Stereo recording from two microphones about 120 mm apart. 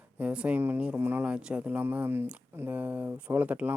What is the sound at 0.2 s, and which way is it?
Speech, 10° right (ahead or behind).